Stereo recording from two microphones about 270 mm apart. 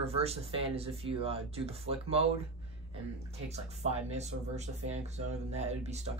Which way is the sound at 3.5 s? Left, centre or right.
Right.